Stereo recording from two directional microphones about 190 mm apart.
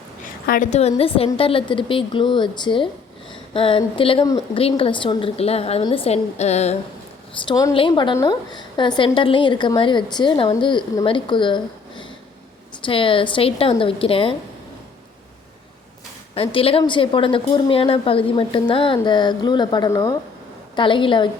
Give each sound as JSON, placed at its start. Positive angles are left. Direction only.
{"t": 0.4, "sound": "a woman's voice", "side_deg": 45}
{"t": 7.4, "sound": "a woman's voice", "side_deg": 20}
{"t": 16.3, "sound": "a woman's voice", "side_deg": 30}